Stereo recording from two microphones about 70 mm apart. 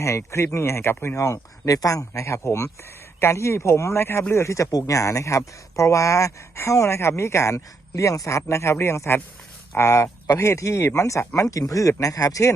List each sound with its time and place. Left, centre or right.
0.0 s speech: left
4.7 s speech: left